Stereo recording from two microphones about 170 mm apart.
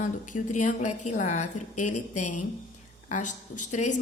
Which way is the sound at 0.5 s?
45° left (ahead or behind).